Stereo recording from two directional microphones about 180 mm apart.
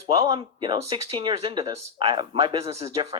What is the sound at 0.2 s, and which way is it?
Speech, 30° right (ahead or behind).